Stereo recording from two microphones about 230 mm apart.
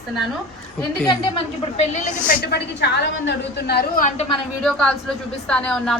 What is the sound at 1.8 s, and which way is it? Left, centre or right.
A woman's voice, left.